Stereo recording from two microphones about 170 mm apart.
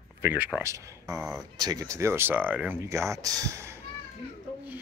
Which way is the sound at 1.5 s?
20° right (ahead or behind).